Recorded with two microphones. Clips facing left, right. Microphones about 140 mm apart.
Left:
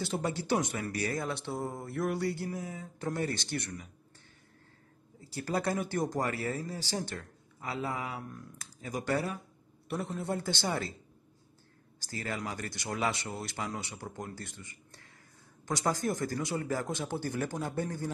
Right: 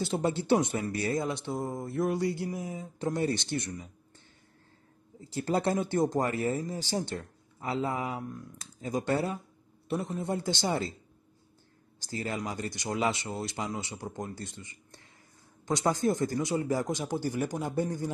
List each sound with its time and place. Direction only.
0.0 s speech: 25° right (ahead or behind)
5.3 s speech: 25° right (ahead or behind)
12.1 s speech: 20° right (ahead or behind)